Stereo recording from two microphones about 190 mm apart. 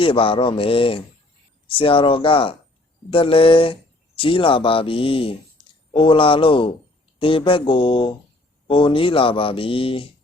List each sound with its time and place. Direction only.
0.0 s speech: 30° left (ahead or behind)